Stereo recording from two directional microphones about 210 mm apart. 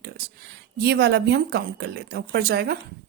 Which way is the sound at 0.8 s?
50° right (ahead or behind).